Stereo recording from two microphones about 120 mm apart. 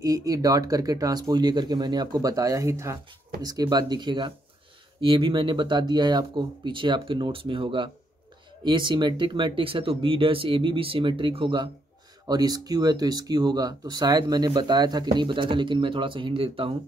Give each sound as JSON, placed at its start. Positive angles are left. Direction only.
{"t": 0.0, "sound": "speech", "side_deg": -30}